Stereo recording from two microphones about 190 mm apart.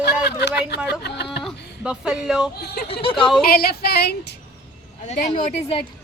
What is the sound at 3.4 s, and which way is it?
Speech, 55° left (ahead or behind).